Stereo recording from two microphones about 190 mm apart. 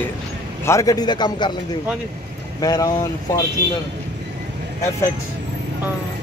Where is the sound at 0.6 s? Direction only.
15° left (ahead or behind).